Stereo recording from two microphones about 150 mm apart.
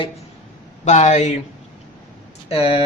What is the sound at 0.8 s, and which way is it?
Speech, 50° left (ahead or behind).